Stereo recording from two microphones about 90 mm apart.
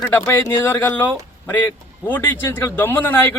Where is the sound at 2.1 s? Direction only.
25° left (ahead or behind).